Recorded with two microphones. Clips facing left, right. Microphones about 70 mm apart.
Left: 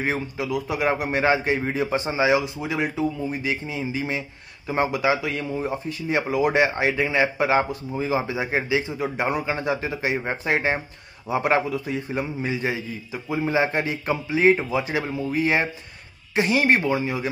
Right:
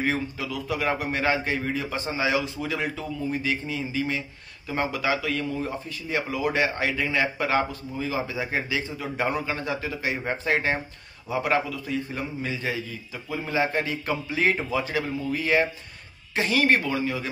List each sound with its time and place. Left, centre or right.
0.0 s a man's voice: centre